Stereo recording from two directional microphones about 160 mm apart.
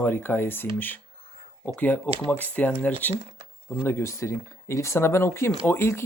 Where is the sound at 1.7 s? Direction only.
10° left (ahead or behind).